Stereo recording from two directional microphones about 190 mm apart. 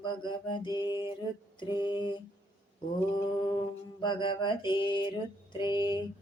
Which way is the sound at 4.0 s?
25° left (ahead or behind).